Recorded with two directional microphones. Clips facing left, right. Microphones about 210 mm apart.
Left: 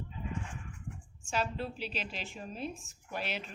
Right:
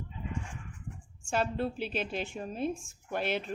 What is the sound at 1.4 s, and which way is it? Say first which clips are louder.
A woman's voice: right 4 dB; 55° right (ahead or behind).